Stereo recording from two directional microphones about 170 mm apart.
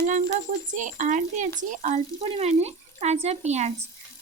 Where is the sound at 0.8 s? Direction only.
50° right (ahead or behind).